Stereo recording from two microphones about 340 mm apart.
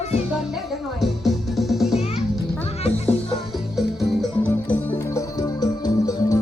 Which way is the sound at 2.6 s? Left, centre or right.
Centre.